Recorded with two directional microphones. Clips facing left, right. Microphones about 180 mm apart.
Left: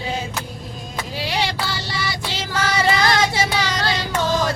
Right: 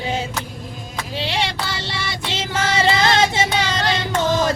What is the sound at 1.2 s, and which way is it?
Child singing, 25° right (ahead or behind).